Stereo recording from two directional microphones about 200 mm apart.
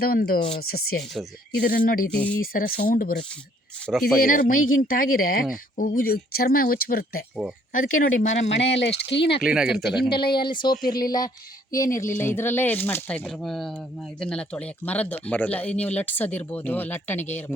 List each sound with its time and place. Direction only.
0.0 s speech: 50° left (ahead or behind)
2.1 s speech: 5° left (ahead or behind)
2.4 s speech: 45° left (ahead or behind)
8.6 s speech: 60° left (ahead or behind)
9.4 s speech: 5° right (ahead or behind)
10.1 s speech: 25° left (ahead or behind)